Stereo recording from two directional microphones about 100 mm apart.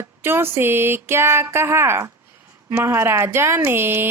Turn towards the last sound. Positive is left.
turn(degrees=-25)  # may be behind; listen again after turning